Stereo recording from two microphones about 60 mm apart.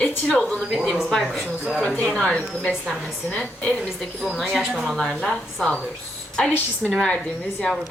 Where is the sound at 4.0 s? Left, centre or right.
Centre.